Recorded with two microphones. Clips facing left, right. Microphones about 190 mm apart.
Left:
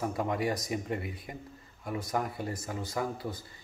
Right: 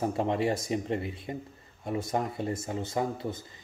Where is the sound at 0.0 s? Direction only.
25° right (ahead or behind).